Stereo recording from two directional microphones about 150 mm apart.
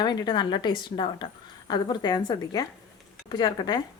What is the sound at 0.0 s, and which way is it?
A woman's voice, 30° left (ahead or behind).